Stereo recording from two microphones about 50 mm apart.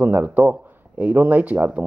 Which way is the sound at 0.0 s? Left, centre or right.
Right.